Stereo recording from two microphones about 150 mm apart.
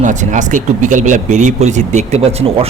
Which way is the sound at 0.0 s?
55° right (ahead or behind).